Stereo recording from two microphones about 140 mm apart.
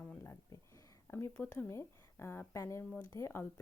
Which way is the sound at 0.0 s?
15° left (ahead or behind).